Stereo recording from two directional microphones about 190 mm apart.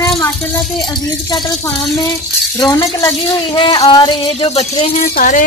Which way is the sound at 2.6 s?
20° left (ahead or behind).